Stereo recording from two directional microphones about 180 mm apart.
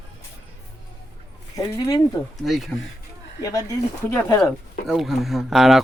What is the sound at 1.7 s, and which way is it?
Speech, 20° left (ahead or behind).